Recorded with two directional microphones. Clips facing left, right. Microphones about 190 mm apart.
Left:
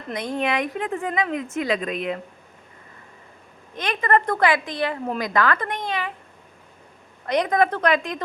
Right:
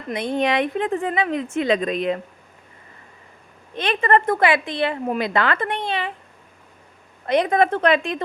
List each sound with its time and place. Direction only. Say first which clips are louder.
0.2 s a woman's voice: right 4 dB; 30° right (ahead or behind)
3.8 s a woman's voice: right 3 dB; 30° right (ahead or behind)
7.3 s a woman's voice: right 2 dB; 25° right (ahead or behind)